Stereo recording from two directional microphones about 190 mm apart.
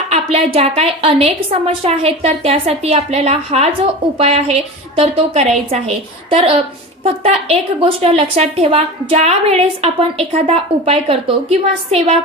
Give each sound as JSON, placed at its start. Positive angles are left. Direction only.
{"t": 0.1, "sound": "a woman's voice", "side_deg": -30}